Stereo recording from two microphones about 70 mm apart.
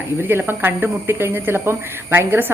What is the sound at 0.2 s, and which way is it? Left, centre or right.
Speech, right.